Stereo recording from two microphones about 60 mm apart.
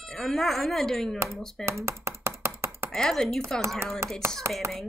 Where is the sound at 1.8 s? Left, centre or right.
Right.